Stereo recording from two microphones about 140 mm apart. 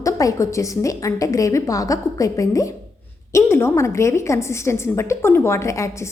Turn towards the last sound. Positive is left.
turn(degrees=20)  # may be behind; listen again after turning